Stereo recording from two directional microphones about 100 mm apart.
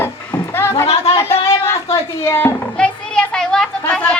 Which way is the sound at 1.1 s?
25° left (ahead or behind).